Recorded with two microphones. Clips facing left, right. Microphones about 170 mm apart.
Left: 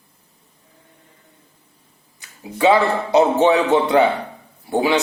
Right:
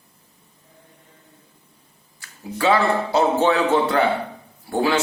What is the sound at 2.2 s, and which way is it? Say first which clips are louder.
A man's voice: left 4 dB; 20° left (ahead or behind).